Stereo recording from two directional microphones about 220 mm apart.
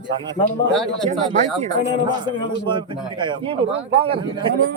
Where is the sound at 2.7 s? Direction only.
20° right (ahead or behind).